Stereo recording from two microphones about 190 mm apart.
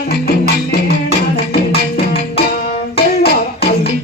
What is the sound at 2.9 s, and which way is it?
Plucked string instrument, 55° left (ahead or behind).